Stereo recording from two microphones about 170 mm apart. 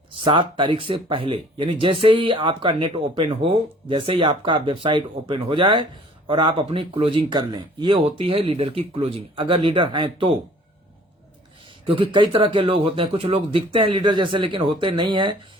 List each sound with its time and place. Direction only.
0.1 s speech: 30° right (ahead or behind)
11.9 s speech: 30° right (ahead or behind)